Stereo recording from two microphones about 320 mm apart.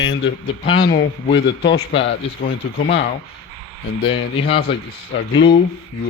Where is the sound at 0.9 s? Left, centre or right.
Left.